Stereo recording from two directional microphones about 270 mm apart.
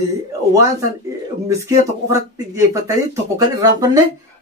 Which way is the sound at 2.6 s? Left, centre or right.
Centre.